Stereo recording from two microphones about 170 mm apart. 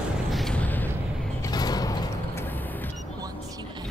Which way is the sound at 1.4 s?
25° left (ahead or behind).